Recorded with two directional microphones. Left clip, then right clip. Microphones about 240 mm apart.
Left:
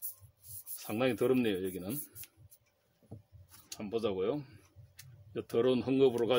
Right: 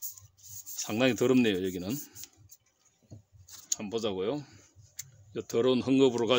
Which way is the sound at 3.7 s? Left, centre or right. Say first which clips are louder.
Right 2 dB; right.